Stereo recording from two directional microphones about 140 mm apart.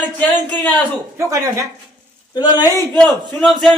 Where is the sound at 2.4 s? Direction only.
30° left (ahead or behind).